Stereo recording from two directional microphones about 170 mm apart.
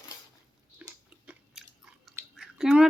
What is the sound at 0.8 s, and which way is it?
Chewing, 10° right (ahead or behind).